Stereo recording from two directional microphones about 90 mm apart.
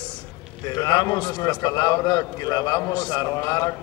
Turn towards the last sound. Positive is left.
turn(degrees=45)  # may be behind; listen again after turning